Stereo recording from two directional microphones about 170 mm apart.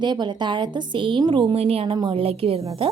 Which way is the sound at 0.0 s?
25° right (ahead or behind).